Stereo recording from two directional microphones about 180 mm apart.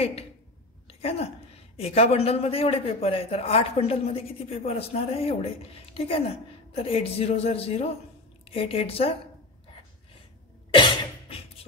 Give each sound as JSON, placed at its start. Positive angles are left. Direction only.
{"t": 0.8, "sound": "a sound", "side_deg": 35}
{"t": 1.8, "sound": "a man's voice", "side_deg": 35}
{"t": 10.8, "sound": "cough", "side_deg": 30}